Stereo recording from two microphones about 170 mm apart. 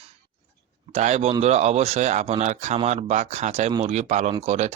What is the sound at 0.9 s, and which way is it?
Speech, 40° right (ahead or behind).